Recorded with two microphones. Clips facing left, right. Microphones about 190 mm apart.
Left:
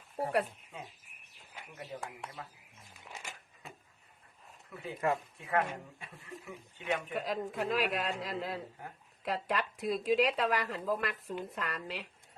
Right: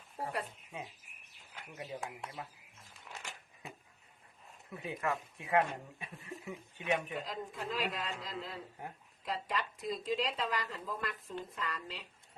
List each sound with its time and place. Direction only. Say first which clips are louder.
1.9 s speech: even; 20° right (ahead or behind)
3.0 s a sound: left 1 dB; centre (ahead or behind)
4.7 s speech: right 1 dB; 20° right (ahead or behind)
4.9 s speech: left 5 dB; 30° left (ahead or behind)
5.5 s speech: right 1 dB; 20° right (ahead or behind)
7.1 s speech: left 5 dB; 65° left (ahead or behind)